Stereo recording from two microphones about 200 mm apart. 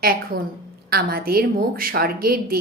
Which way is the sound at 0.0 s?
45° right (ahead or behind).